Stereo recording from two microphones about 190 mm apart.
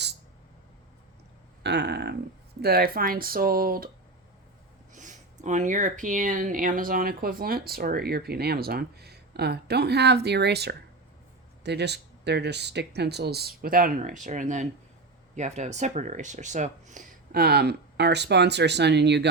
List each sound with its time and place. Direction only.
1.6 s speech: 65° right (ahead or behind)
4.9 s speech: 40° right (ahead or behind); by 19.3 s 65° right (ahead or behind)